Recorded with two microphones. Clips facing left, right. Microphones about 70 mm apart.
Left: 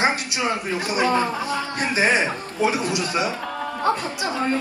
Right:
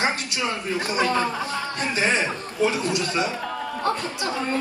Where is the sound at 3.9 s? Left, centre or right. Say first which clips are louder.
Left 3 dB; left.